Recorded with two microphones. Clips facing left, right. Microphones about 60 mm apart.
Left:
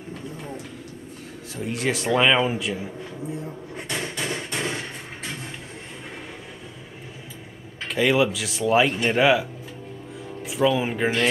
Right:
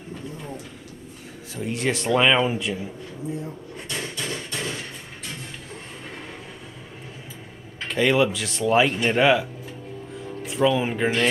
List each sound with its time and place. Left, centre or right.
1.5 s speech: centre
3.7 s hammer: left
7.8 s speech: centre
10.1 s music: centre